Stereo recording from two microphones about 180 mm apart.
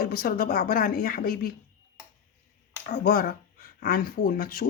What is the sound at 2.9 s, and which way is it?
Speech, 55° left (ahead or behind).